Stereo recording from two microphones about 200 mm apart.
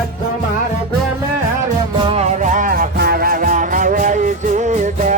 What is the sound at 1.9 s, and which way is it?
Music, 30° right (ahead or behind).